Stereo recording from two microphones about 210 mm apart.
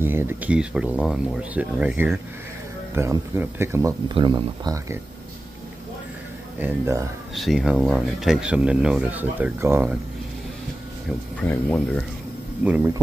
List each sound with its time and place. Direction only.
0.0 s speech: 10° right (ahead or behind)
6.6 s speech: 10° right (ahead or behind)
7.3 s speech: centre (ahead or behind)
11.3 s speech: 5° left (ahead or behind)
12.6 s speech: 5° right (ahead or behind)